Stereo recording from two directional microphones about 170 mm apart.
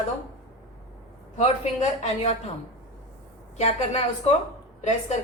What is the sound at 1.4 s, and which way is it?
Speech, 40° left (ahead or behind).